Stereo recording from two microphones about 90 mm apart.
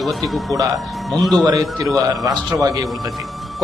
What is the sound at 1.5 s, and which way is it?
A man's voice, 45° right (ahead or behind).